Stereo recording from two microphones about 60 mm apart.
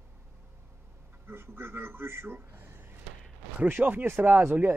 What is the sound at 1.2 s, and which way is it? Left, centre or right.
A man's voice, right.